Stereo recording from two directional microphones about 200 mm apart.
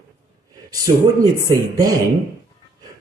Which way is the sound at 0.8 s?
20° right (ahead or behind).